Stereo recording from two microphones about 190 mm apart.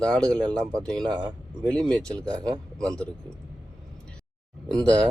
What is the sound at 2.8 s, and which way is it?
Speech, 5° left (ahead or behind).